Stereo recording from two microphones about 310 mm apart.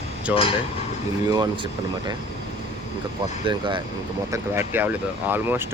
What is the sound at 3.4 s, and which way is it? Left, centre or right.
Speech, centre.